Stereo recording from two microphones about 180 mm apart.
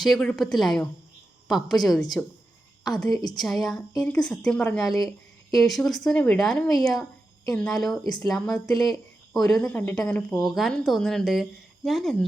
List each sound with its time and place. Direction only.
0.0 s a woman's voice: 5° left (ahead or behind)
1.9 s speech: 20° left (ahead or behind)
2.8 s a woman's voice: centre (ahead or behind)
3.1 s speech: 20° left (ahead or behind)
3.3 s a woman's voice: centre (ahead or behind)
4.9 s speech: 20° left (ahead or behind)
5.6 s a woman's voice: centre (ahead or behind)